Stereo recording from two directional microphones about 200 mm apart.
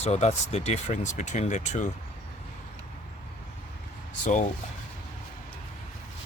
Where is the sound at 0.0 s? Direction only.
35° left (ahead or behind).